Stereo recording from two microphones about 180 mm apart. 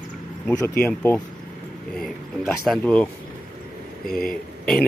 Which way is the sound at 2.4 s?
5° left (ahead or behind).